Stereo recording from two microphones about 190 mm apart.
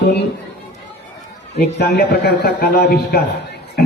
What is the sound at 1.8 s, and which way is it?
A man's voice, 60° left (ahead or behind).